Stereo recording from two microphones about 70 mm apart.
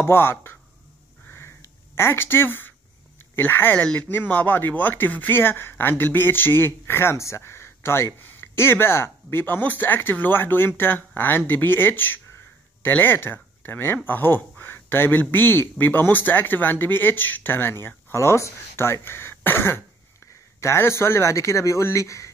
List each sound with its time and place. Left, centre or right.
0.0 s speech: left
2.0 s speech: left
3.8 s speech: centre; by 22.3 s left